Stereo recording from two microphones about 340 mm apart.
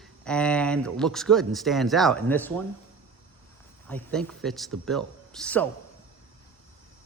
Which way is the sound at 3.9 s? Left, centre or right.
Centre.